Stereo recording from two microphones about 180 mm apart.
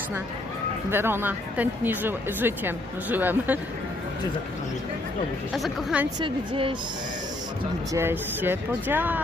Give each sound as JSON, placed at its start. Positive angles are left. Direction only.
{"t": 0.9, "sound": "speech", "side_deg": -10}
{"t": 5.5, "sound": "a woman's voice", "side_deg": -5}
{"t": 6.1, "sound": "a woman's voice", "side_deg": -25}
{"t": 7.9, "sound": "speech", "side_deg": -10}